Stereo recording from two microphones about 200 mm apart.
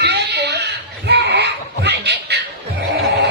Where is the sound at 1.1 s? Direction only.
55° right (ahead or behind).